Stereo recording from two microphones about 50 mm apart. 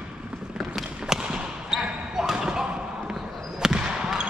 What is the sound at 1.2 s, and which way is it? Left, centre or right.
Basketball bounce, centre.